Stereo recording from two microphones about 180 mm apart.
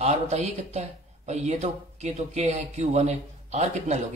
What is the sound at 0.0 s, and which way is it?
Speech, 40° right (ahead or behind).